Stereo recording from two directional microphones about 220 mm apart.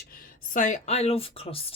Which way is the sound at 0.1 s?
40° left (ahead or behind).